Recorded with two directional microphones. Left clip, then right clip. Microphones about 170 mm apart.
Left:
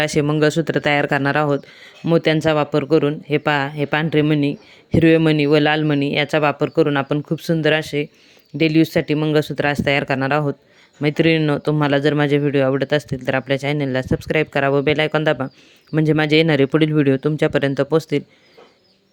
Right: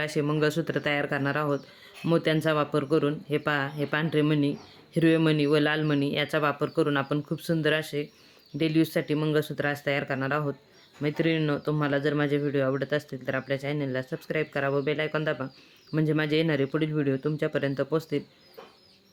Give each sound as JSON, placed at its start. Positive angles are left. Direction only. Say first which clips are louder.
{"t": 0.0, "sound": "speech", "louder": "left 9 dB", "side_deg": 45}